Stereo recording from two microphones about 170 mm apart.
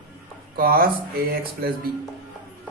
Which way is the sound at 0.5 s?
60° right (ahead or behind).